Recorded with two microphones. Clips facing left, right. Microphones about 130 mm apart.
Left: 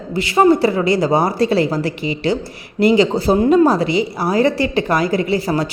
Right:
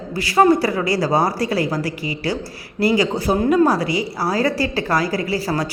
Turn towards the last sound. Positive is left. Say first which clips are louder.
# left 4 dB
turn(degrees=25)  # may be behind; listen again after turning